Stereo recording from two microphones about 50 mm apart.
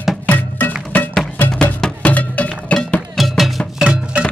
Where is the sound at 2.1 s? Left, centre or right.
Left.